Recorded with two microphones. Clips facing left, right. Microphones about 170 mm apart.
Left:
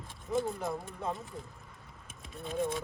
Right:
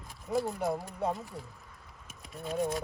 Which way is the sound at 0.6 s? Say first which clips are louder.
Right 4 dB; centre (ahead or behind).